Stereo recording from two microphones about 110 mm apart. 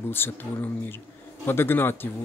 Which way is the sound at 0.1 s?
20° left (ahead or behind).